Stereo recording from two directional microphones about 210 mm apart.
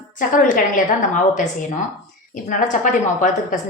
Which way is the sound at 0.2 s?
40° left (ahead or behind).